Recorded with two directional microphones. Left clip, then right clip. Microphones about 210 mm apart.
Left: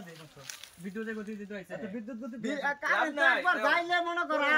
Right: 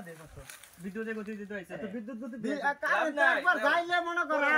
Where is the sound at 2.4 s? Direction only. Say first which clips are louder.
Right 1 dB; 5° left (ahead or behind).